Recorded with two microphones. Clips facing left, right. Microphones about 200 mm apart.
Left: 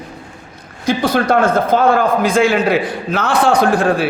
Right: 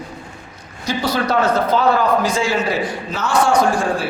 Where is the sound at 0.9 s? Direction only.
50° left (ahead or behind).